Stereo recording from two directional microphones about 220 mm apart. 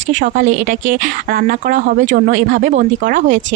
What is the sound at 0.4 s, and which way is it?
Speech, 40° right (ahead or behind).